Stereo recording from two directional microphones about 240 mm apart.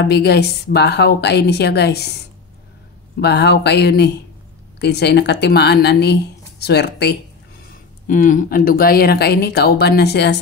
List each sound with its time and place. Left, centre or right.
0.0 s speech: left
3.2 s speech: left
8.1 s speech: left